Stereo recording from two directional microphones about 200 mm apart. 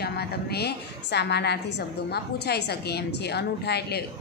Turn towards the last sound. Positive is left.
turn(degrees=55)  # may be behind; listen again after turning